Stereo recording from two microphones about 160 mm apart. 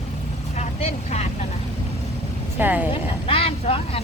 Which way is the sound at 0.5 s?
40° left (ahead or behind).